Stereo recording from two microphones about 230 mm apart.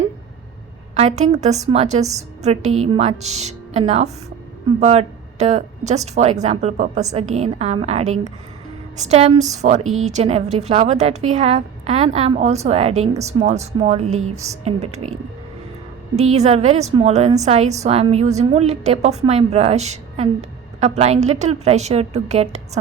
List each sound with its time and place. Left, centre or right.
0.9 s a woman's voice: right
16.1 s a woman's voice: right